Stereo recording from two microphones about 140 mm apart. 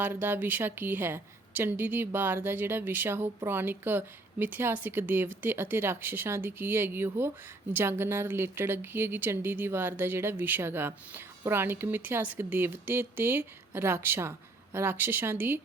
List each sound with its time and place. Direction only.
0.0 s speech: 15° right (ahead or behind)